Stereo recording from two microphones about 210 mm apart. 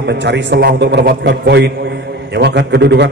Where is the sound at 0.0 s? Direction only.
55° right (ahead or behind).